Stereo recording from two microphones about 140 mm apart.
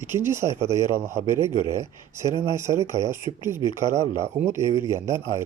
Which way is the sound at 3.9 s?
50° right (ahead or behind).